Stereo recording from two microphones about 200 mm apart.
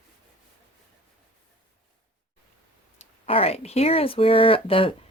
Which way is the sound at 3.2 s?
30° left (ahead or behind).